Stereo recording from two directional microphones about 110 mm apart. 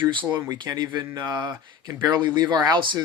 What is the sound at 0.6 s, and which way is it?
Speech, 40° right (ahead or behind).